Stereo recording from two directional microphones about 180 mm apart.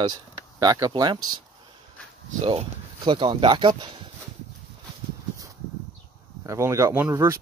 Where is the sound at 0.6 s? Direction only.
20° right (ahead or behind).